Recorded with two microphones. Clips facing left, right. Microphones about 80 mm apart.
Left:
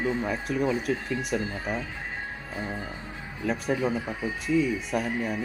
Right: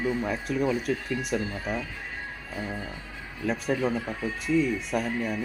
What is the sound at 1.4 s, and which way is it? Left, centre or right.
Speech, left.